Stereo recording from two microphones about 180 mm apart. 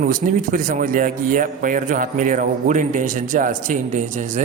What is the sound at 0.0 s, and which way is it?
A man's voice, 50° right (ahead or behind).